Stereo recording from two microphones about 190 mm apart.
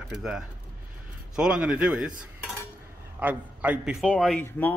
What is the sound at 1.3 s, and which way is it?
Cutlery, 5° right (ahead or behind).